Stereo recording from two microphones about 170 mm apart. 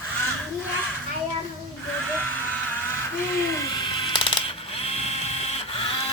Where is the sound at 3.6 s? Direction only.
25° left (ahead or behind).